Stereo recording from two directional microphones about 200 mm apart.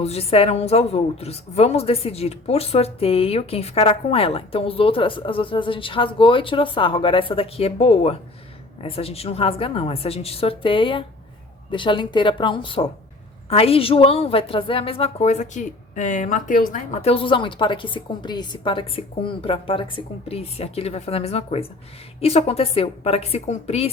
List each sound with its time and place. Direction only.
0.0 s a woman's voice: 30° left (ahead or behind)